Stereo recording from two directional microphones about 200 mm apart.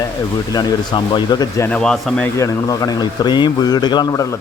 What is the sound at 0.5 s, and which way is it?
Speech, 20° left (ahead or behind).